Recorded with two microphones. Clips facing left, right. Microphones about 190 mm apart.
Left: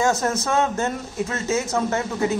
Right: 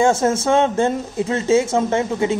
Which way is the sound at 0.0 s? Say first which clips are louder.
Right 5 dB; 25° right (ahead or behind).